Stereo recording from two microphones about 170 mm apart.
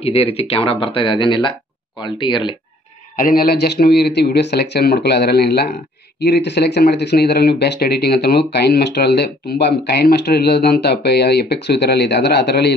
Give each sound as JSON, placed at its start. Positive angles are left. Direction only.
{"t": 0.0, "sound": "speech", "side_deg": 35}
{"t": 3.2, "sound": "speech", "side_deg": 60}